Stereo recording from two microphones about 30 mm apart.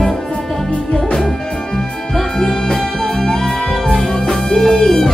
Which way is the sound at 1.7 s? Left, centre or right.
Centre.